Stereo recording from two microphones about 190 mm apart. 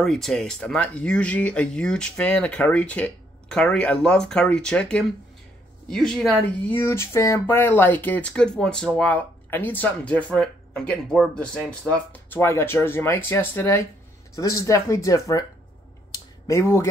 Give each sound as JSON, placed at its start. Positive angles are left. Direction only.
{"t": 0.0, "sound": "speech", "side_deg": 0}
{"t": 16.4, "sound": "speech", "side_deg": 15}